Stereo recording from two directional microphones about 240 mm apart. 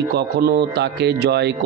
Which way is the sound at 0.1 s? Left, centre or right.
Right.